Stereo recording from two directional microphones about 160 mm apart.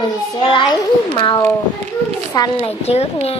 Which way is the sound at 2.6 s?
40° left (ahead or behind).